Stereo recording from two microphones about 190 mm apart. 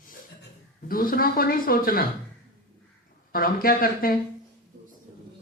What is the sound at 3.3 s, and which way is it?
Speech, 50° left (ahead or behind).